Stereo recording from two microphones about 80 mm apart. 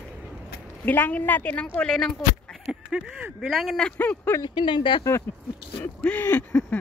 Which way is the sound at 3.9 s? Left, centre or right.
Left.